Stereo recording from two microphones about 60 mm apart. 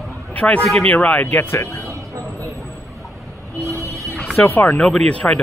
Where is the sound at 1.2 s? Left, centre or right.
Left.